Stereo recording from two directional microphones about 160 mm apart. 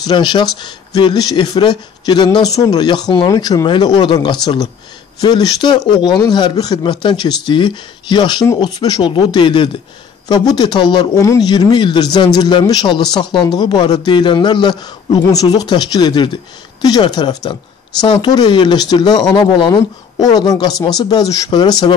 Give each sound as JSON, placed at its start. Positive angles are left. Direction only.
{"t": 0.0, "sound": "speech", "side_deg": 30}